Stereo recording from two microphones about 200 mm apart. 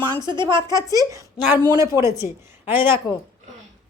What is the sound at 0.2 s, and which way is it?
A woman's voice, 20° right (ahead or behind).